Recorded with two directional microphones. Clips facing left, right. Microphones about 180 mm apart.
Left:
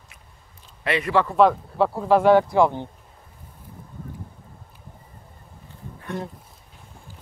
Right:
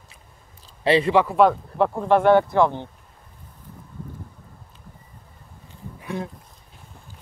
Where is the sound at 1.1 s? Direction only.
5° right (ahead or behind).